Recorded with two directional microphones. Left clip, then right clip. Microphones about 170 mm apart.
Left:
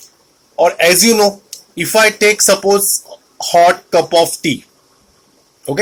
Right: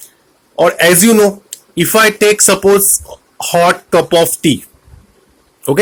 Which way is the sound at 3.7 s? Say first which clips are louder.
Right 1 dB; 45° right (ahead or behind).